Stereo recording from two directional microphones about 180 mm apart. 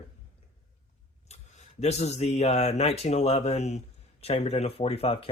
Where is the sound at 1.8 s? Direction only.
35° left (ahead or behind).